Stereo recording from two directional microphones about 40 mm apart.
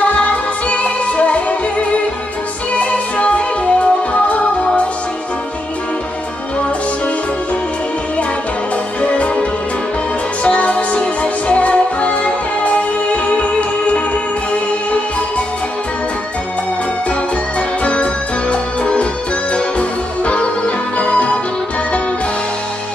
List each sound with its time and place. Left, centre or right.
0.0 s music: left
9.0 s music: left
17.1 s music: left